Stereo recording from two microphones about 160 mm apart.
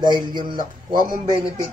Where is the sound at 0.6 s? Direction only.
55° right (ahead or behind).